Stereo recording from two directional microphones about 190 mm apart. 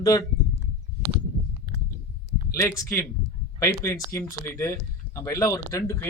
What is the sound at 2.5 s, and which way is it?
Speech, 15° left (ahead or behind).